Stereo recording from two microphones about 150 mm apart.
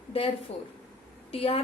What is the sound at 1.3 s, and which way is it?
Speech, 40° left (ahead or behind).